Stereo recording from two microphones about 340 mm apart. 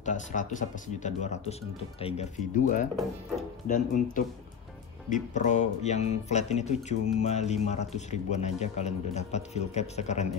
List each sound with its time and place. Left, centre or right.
0.0 s speech: left
5.3 s speech: left